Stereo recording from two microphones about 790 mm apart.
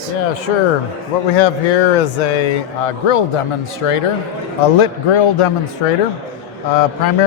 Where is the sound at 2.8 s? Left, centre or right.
Left.